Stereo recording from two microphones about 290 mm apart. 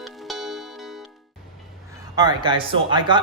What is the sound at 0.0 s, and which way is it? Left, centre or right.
Music, centre.